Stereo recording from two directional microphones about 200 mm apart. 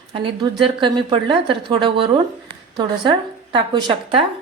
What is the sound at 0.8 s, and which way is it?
Speech, 25° right (ahead or behind).